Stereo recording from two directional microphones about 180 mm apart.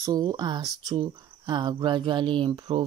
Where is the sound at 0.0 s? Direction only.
20° right (ahead or behind).